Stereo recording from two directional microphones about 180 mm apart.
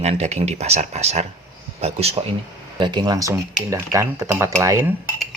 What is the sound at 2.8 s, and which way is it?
Speech, 25° right (ahead or behind).